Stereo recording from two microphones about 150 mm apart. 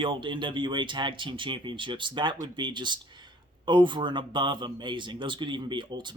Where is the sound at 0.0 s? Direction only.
35° right (ahead or behind).